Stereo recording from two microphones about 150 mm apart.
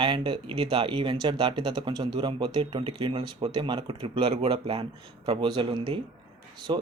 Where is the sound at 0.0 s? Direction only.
35° right (ahead or behind).